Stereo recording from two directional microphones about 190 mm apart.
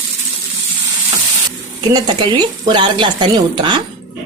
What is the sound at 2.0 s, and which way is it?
Speech, 25° right (ahead or behind).